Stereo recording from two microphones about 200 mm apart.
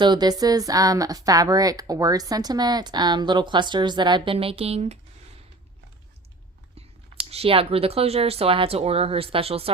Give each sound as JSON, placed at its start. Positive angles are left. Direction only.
{"t": 0.0, "sound": "a woman's voice", "side_deg": -20}
{"t": 7.3, "sound": "a woman's voice", "side_deg": -30}